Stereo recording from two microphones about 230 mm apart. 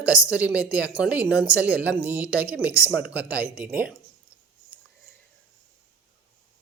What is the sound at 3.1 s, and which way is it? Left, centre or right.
Speech, centre.